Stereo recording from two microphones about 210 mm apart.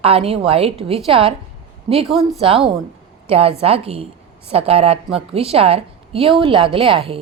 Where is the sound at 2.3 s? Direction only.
25° right (ahead or behind).